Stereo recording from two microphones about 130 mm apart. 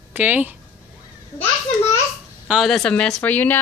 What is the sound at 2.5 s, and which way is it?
Speech, centre (ahead or behind).